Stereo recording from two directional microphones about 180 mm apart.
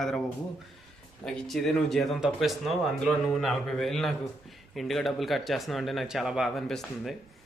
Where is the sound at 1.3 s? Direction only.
Centre (ahead or behind).